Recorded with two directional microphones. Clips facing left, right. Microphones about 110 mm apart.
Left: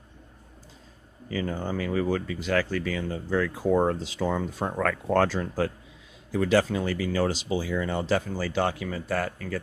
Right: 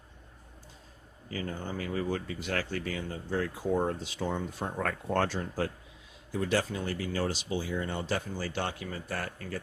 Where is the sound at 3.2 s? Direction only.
90° left.